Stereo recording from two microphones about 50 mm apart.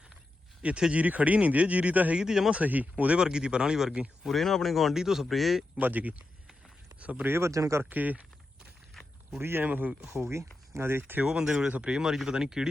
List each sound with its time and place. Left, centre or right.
0.8 s speech: centre
1.0 s speech: right
2.1 s speech: centre
2.5 s speech: right; by 4.0 s centre
4.3 s speech: centre
5.7 s speech: right
7.3 s speech: right
7.9 s speech: right
9.0 s a sound: centre
9.4 s speech: right
9.6 s speech: right
10.0 s speech: right
11.0 s speech: right
11.3 s speech: centre